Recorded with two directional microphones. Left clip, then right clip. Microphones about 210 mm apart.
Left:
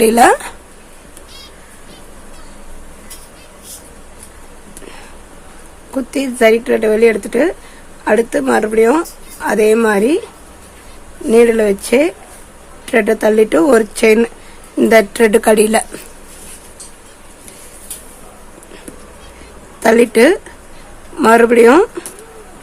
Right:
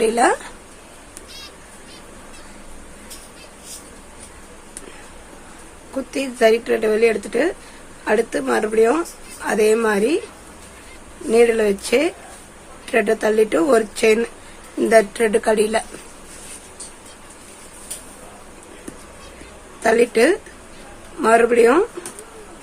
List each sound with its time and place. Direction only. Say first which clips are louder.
0.0 s a woman's voice: left 8 dB; 35° left (ahead or behind)
6.1 s speech: left 5 dB; 30° left (ahead or behind)
11.3 s a woman's voice: left 5 dB; 25° left (ahead or behind)
19.8 s a woman's voice: left 6 dB; 30° left (ahead or behind)